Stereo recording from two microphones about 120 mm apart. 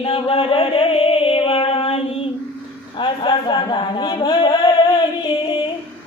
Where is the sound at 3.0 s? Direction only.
40° left (ahead or behind).